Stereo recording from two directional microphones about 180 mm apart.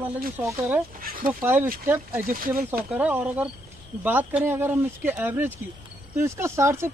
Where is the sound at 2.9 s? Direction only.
10° right (ahead or behind).